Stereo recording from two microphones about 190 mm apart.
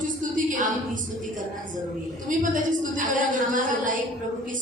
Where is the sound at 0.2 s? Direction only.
45° right (ahead or behind).